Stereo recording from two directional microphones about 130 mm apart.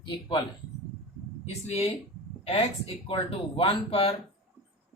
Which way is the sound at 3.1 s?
45° left (ahead or behind).